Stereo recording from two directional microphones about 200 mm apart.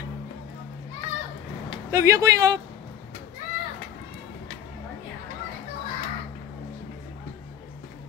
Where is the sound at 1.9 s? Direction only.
15° right (ahead or behind).